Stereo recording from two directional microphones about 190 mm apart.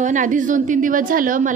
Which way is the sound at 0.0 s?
40° right (ahead or behind).